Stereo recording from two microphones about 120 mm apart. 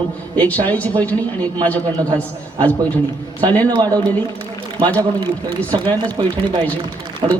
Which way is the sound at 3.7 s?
35° right (ahead or behind).